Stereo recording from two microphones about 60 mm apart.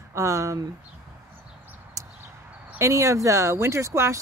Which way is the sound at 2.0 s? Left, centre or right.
Right.